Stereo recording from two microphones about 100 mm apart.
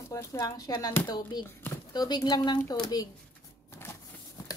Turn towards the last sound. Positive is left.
turn(degrees=40)  # may be behind; listen again after turning